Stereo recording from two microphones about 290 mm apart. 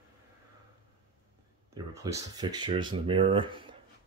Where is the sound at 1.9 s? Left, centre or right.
Centre.